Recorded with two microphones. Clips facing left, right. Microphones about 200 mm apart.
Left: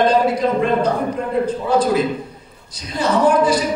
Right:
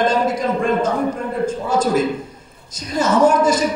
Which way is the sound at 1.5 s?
45° right (ahead or behind).